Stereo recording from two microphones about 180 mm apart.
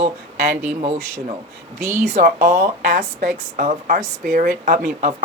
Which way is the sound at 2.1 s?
45° right (ahead or behind).